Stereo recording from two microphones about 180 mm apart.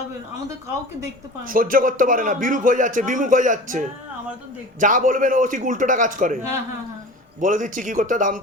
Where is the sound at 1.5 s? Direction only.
50° right (ahead or behind).